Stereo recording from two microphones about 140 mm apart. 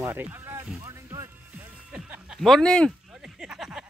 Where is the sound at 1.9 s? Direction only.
10° right (ahead or behind).